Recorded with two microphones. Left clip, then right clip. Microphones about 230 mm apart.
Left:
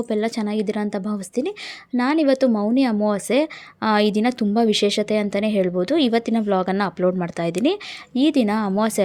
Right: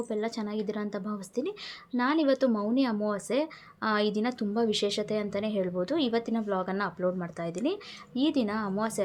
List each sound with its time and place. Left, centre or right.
0.1 s speech: left